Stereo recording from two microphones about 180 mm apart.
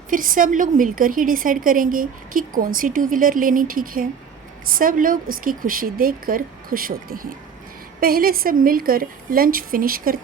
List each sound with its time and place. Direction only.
0.1 s a woman's voice: 50° right (ahead or behind)